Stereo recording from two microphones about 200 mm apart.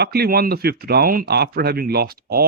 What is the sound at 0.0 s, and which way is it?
Speech, 50° right (ahead or behind).